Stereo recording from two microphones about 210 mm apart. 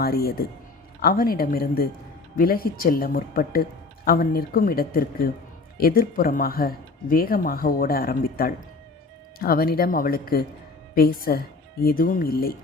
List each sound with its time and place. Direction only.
0.0 s speech: 45° left (ahead or behind)